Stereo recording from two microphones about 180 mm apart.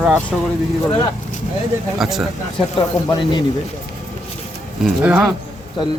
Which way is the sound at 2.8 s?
20° left (ahead or behind).